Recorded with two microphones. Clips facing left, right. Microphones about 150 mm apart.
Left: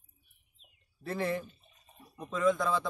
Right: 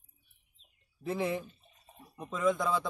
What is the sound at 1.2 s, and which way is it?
A man's voice, 5° right (ahead or behind).